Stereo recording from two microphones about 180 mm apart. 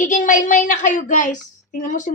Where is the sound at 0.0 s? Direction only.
45° left (ahead or behind).